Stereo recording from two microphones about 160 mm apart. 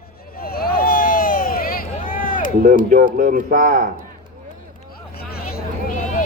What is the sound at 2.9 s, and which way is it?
Speech, 55° right (ahead or behind).